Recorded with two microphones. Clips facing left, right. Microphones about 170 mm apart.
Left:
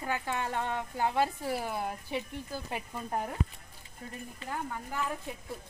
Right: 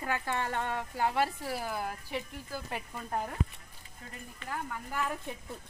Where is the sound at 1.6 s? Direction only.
Centre (ahead or behind).